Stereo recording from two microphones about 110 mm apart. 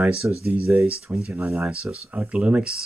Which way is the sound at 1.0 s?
5° right (ahead or behind).